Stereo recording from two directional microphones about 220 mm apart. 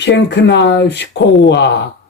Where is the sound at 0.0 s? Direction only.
50° left (ahead or behind).